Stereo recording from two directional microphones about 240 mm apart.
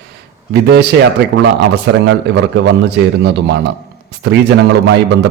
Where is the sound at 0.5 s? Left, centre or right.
Right.